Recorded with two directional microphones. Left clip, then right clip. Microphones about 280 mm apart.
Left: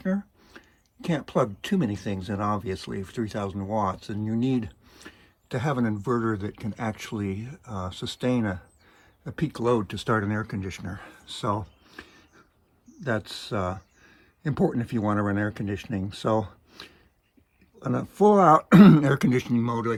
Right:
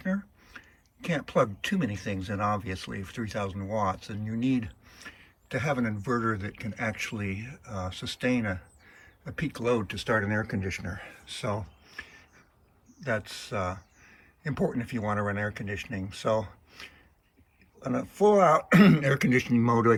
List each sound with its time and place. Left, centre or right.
0.0 s a sound: centre
1.0 s speech: centre
14.5 s speech: centre
17.7 s speech: centre